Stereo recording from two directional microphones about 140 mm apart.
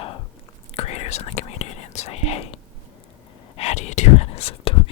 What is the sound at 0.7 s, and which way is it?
Whispering, 45° left (ahead or behind).